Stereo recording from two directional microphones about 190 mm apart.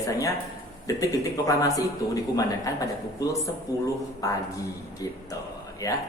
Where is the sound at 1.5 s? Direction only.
20° left (ahead or behind).